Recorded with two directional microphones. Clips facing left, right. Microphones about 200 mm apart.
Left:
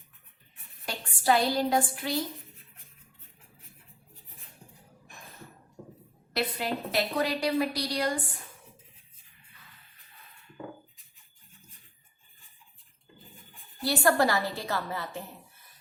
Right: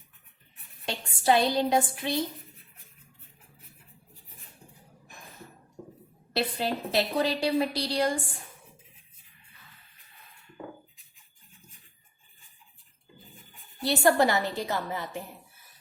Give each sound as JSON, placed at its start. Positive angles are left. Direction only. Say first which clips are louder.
{"t": 0.9, "sound": "a woman's voice", "louder": "right 2 dB", "side_deg": -25}
{"t": 6.3, "sound": "a woman's voice", "louder": "right 2 dB", "side_deg": -30}
{"t": 13.8, "sound": "a woman's voice", "louder": "right 2 dB", "side_deg": -20}